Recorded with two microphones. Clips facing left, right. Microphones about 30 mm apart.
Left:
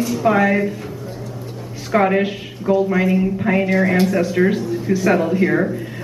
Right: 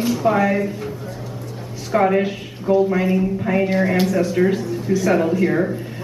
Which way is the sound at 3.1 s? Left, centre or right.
Left.